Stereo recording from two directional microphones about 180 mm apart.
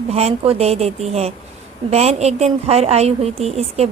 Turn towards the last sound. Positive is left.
turn(degrees=-35)  # may be behind; listen again after turning